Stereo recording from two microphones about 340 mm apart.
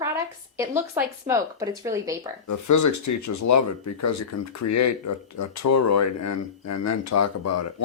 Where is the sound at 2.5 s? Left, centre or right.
Left.